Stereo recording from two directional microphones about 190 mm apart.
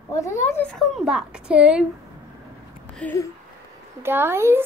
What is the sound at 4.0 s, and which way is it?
Speech, 10° right (ahead or behind).